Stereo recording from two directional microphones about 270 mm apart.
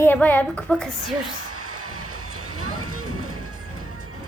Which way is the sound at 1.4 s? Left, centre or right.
Right.